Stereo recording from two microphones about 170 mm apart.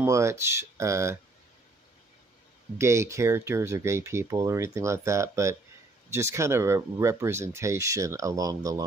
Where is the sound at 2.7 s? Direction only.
15° right (ahead or behind).